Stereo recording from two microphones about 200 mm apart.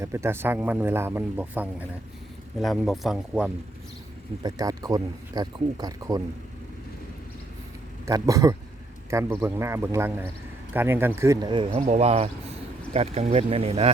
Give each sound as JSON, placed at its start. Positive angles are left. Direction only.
{"t": 0.0, "sound": "speech", "side_deg": -15}
{"t": 4.4, "sound": "speech", "side_deg": -20}
{"t": 8.0, "sound": "speech", "side_deg": -15}
{"t": 11.6, "sound": "speech", "side_deg": -30}